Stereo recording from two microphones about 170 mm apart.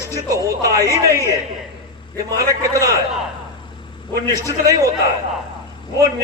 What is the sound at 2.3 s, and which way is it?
Speech, 20° right (ahead or behind).